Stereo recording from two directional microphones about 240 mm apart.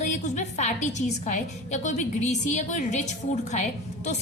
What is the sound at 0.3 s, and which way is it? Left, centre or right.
A woman's voice, left.